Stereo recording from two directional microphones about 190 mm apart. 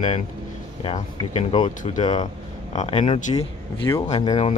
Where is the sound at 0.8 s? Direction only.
30° left (ahead or behind).